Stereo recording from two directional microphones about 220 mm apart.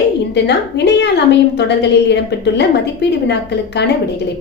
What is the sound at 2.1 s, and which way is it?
A woman's voice, 50° left (ahead or behind).